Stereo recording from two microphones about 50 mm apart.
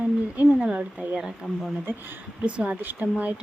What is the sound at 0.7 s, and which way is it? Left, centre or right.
Speech, right.